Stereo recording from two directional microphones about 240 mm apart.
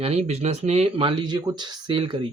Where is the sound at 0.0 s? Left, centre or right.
Right.